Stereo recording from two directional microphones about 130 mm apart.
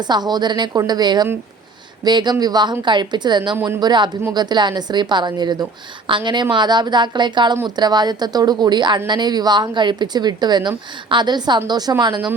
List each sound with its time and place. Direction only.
0.0 s speech: 35° right (ahead or behind)